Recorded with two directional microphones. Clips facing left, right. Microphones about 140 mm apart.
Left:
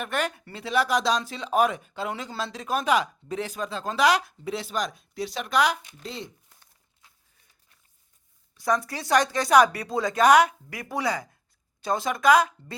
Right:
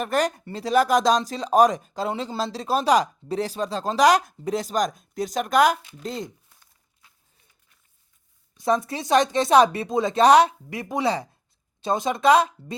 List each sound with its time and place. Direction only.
0.0 s speech: 40° right (ahead or behind)
8.5 s a woman's voice: 25° right (ahead or behind)